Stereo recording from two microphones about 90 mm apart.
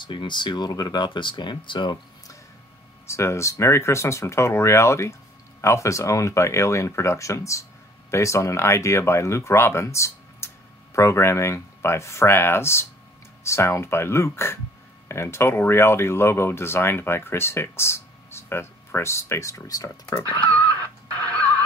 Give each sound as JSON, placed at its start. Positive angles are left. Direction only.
{"t": 0.0, "sound": "speech", "side_deg": 65}
{"t": 3.1, "sound": "speech", "side_deg": 30}
{"t": 20.3, "sound": "speech", "side_deg": 15}
{"t": 21.1, "sound": "neigh", "side_deg": 15}